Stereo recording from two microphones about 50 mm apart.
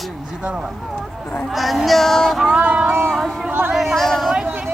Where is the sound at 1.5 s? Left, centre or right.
Centre.